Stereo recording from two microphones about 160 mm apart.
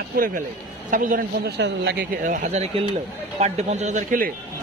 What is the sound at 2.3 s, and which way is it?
Speech, 45° right (ahead or behind).